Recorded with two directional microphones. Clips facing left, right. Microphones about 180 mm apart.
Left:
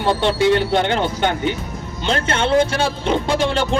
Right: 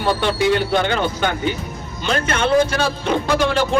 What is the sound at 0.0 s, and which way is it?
Speech, 25° left (ahead or behind).